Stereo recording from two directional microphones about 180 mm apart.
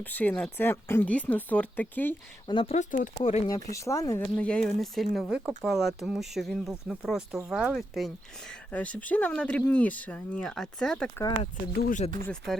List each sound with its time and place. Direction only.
0.0 s speech: 10° left (ahead or behind)
2.5 s speech: 30° left (ahead or behind)
2.7 s speech: 45° left (ahead or behind)
3.4 s speech: 20° left (ahead or behind)
11.8 s speech: 50° left (ahead or behind)
12.2 s speech: 5° left (ahead or behind)